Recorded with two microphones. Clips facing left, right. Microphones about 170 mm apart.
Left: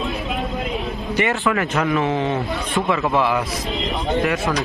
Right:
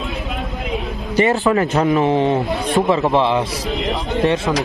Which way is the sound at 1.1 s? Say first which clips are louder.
Right 5 dB; 35° right (ahead or behind).